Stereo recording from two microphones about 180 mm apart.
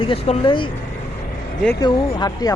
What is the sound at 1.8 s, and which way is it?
Speech, 20° left (ahead or behind).